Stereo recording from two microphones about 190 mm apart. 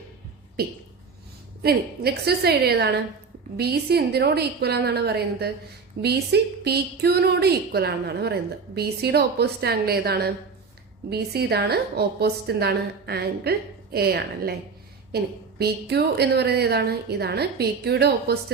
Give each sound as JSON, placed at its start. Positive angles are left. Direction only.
{"t": 1.6, "sound": "a woman's voice", "side_deg": -55}